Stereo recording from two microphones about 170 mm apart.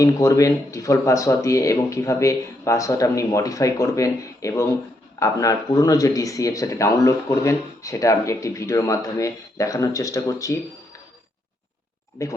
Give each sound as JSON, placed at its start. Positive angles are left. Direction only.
{"t": 0.0, "sound": "speech", "side_deg": 20}
{"t": 12.2, "sound": "speech", "side_deg": 20}